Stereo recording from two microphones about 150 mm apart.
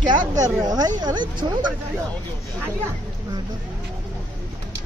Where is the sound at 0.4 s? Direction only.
25° right (ahead or behind).